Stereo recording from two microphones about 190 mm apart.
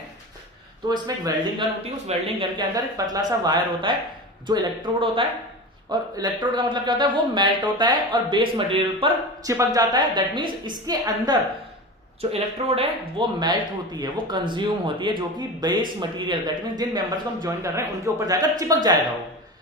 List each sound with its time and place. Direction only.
0.9 s a man's voice: 20° right (ahead or behind)
9.5 s a man's voice: 15° right (ahead or behind)
12.3 s a man's voice: 30° right (ahead or behind)